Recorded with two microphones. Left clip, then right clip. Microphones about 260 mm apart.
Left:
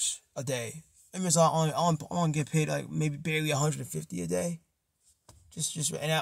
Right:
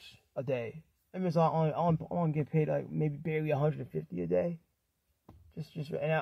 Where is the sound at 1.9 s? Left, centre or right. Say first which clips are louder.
Left 3 dB; left.